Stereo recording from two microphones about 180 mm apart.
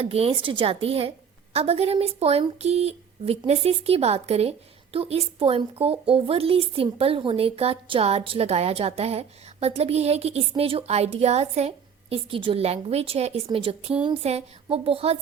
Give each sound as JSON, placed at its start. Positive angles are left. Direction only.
{"t": 0.0, "sound": "a woman's voice", "side_deg": -35}